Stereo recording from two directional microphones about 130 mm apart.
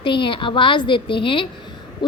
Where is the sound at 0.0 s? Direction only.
40° left (ahead or behind).